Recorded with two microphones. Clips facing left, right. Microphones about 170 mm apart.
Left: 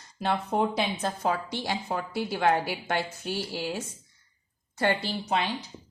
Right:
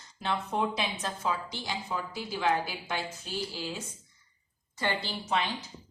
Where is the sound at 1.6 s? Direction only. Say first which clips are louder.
Left 4 dB; 60° left (ahead or behind).